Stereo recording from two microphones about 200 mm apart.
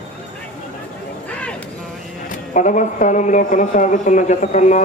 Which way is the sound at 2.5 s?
40° left (ahead or behind).